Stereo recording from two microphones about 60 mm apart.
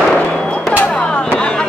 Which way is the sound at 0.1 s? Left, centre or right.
Centre.